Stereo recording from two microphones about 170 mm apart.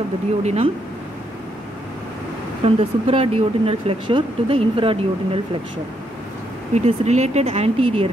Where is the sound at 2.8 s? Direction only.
35° right (ahead or behind).